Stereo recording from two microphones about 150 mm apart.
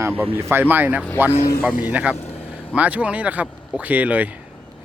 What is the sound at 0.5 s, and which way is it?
Speech, 15° right (ahead or behind).